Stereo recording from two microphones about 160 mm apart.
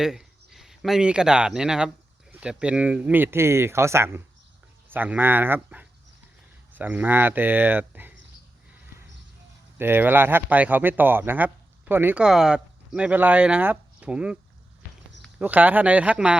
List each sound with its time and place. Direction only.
0.0 s speech: 5° right (ahead or behind)
9.7 s speech: 15° right (ahead or behind)
15.4 s speech: 10° right (ahead or behind)